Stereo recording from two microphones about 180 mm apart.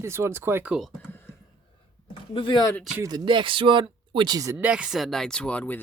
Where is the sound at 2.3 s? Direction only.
30° left (ahead or behind).